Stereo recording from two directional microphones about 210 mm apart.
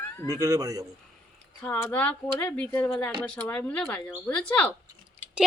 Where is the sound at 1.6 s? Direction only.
10° left (ahead or behind).